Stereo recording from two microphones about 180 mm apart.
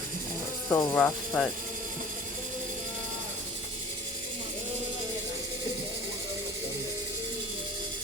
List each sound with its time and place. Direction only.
0.7 s speech: 20° left (ahead or behind)
0.9 s speech: 10° left (ahead or behind)